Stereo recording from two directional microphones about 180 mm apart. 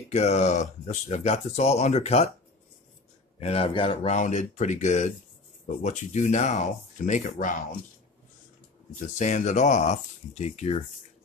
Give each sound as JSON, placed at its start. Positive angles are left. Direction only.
{"t": 0.1, "sound": "speech", "side_deg": 35}
{"t": 3.3, "sound": "speech", "side_deg": 35}
{"t": 9.0, "sound": "speech", "side_deg": 45}